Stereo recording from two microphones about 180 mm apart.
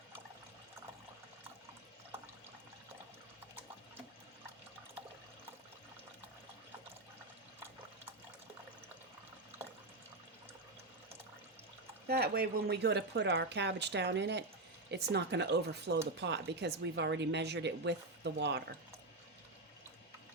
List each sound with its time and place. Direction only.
12.0 s speech: 60° right (ahead or behind)